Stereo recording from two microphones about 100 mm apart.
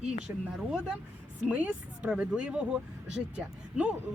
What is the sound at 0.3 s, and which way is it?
Speech, 15° right (ahead or behind).